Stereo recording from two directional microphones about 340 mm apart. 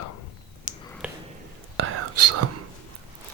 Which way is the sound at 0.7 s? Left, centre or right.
Left.